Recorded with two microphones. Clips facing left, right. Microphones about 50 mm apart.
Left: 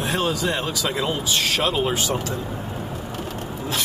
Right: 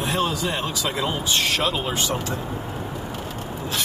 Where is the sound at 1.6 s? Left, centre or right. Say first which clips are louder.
Left 2 dB; centre.